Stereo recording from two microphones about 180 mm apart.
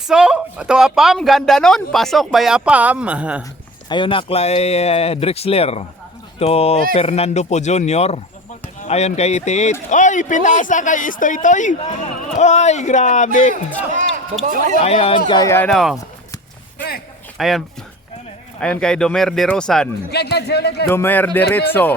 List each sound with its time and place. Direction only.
0.1 s speech: 5° right (ahead or behind)
3.8 s speech: 25° left (ahead or behind)
14.4 s speech: 45° right (ahead or behind)
14.8 s speech: 30° left (ahead or behind)
15.3 s speech: 20° left (ahead or behind)
15.7 s speech: centre (ahead or behind)
17.3 s speech: centre (ahead or behind)
18.6 s speech: 5° left (ahead or behind)
20.1 s speech: 65° left (ahead or behind)
20.8 s speech: 10° left (ahead or behind)